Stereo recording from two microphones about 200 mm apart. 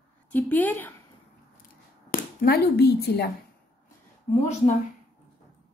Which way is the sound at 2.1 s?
45° left (ahead or behind).